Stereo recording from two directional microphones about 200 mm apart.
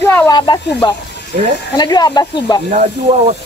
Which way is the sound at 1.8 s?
20° left (ahead or behind).